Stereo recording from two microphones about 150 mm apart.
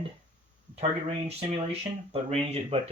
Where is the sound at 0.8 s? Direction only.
45° right (ahead or behind).